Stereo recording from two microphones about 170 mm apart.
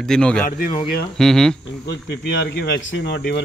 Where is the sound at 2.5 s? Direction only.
80° left.